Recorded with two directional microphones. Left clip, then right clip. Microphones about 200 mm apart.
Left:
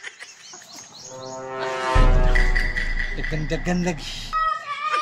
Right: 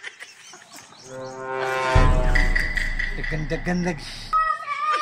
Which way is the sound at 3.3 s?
5° left (ahead or behind).